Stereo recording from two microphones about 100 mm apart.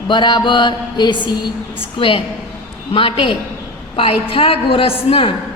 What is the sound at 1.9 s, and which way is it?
A woman's voice, 60° left (ahead or behind).